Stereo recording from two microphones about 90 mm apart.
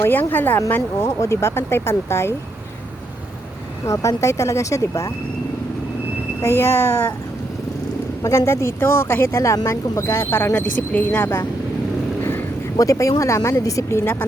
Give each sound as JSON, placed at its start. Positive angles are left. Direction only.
{"t": 0.0, "sound": "speech", "side_deg": 20}
{"t": 3.8, "sound": "speech", "side_deg": 35}
{"t": 6.4, "sound": "speech", "side_deg": 30}
{"t": 8.2, "sound": "speech", "side_deg": 35}
{"t": 10.6, "sound": "speech", "side_deg": 15}
{"t": 12.7, "sound": "speech", "side_deg": 40}
{"t": 14.0, "sound": "speech", "side_deg": 25}